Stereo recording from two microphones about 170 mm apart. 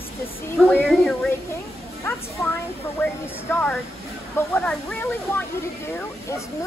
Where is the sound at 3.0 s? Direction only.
10° left (ahead or behind).